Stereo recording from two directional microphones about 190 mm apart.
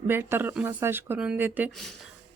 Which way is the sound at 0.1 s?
10° right (ahead or behind).